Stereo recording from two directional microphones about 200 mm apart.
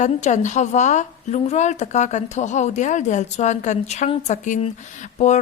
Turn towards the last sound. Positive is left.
turn(degrees=35)  # may be behind; listen again after turning